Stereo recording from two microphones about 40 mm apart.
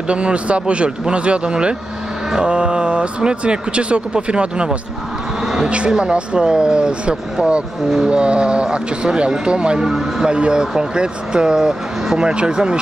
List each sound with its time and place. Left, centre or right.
0.1 s speech: right
5.4 s a sound: centre
5.9 s speech: right
9.8 s speech: centre